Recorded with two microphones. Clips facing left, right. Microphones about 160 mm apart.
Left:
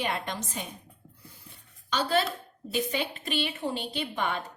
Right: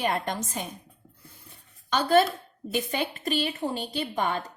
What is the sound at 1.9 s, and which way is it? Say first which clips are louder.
A woman's voice: right 6 dB; 50° right (ahead or behind).